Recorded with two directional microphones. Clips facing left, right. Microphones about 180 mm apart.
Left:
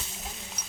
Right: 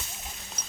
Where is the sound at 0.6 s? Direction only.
10° left (ahead or behind).